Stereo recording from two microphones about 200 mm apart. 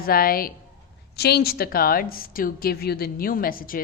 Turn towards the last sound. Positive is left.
turn(degrees=45)  # may be behind; listen again after turning